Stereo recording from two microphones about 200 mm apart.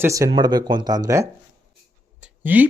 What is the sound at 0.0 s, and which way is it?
Speech, 15° right (ahead or behind).